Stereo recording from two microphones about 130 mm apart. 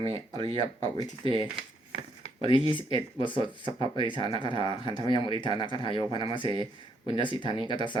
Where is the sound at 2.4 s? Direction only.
40° left (ahead or behind).